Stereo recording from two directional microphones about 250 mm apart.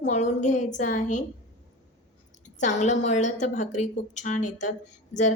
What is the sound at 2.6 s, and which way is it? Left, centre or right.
A woman's voice, left.